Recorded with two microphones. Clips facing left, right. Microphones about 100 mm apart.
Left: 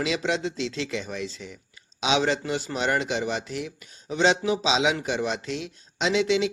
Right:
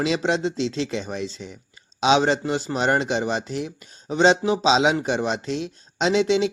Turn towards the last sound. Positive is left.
turn(degrees=-30)  # may be behind; listen again after turning